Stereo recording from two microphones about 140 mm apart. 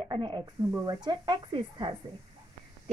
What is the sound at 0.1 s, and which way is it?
Speech, 35° right (ahead or behind).